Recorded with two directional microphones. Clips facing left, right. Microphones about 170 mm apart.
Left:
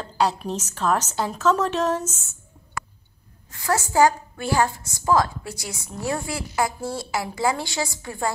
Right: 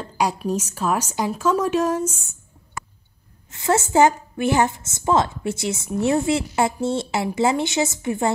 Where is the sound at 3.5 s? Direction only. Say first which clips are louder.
Right 4 dB; 25° right (ahead or behind).